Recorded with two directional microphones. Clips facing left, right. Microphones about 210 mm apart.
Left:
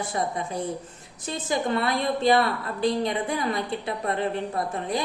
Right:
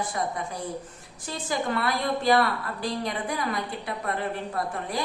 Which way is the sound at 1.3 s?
25° left (ahead or behind).